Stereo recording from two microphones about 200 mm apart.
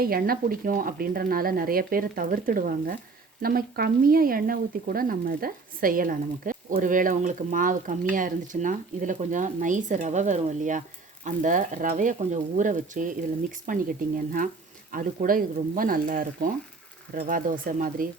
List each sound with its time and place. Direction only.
0.0 s speech: 50° right (ahead or behind)